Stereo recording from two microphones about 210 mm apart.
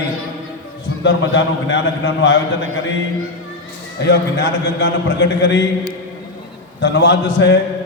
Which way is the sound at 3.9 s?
55° left (ahead or behind).